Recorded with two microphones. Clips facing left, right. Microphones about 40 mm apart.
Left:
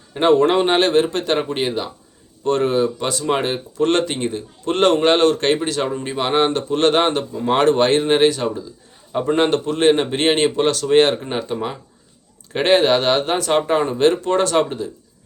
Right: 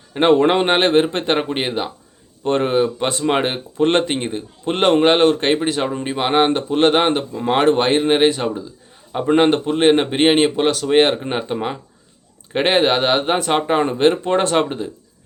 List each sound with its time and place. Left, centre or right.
0.1 s speech: right